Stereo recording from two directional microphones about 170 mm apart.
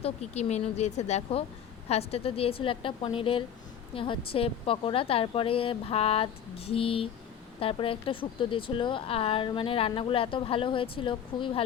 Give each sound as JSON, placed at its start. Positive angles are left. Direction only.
{"t": 0.0, "sound": "speech", "side_deg": 40}